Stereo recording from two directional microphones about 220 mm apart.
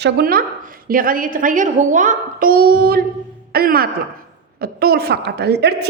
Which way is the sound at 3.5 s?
45° right (ahead or behind).